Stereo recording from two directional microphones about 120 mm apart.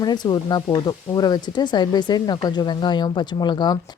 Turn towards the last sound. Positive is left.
turn(degrees=40)  # may be behind; listen again after turning